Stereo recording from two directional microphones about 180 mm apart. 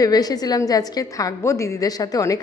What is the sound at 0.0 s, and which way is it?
A woman's voice, 20° left (ahead or behind).